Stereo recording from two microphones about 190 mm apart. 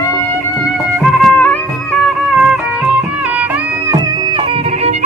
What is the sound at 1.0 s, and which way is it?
Music, centre (ahead or behind).